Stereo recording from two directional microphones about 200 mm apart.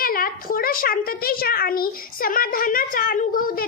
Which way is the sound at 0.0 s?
45° left (ahead or behind).